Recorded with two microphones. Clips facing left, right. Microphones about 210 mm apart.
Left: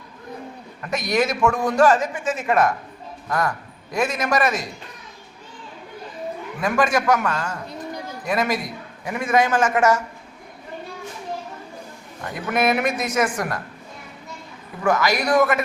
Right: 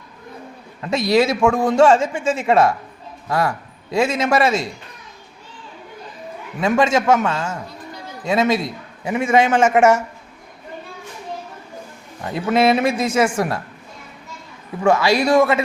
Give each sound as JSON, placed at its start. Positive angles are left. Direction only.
{"t": 0.8, "sound": "a man's voice", "side_deg": -25}
{"t": 3.9, "sound": "a man's voice", "side_deg": -25}
{"t": 6.6, "sound": "a man's voice", "side_deg": -25}
{"t": 12.3, "sound": "a man's voice", "side_deg": -30}
{"t": 14.8, "sound": "a man's voice", "side_deg": -30}